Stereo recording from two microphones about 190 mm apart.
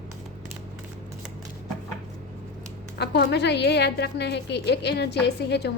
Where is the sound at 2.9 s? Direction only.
60° left (ahead or behind).